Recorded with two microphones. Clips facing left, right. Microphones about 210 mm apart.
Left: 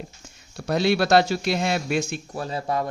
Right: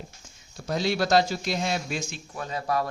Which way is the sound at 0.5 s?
65° left (ahead or behind).